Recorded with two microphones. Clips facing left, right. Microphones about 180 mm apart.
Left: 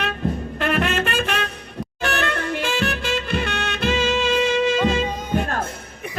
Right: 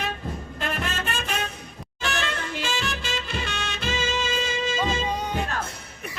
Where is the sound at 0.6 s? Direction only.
65° left (ahead or behind).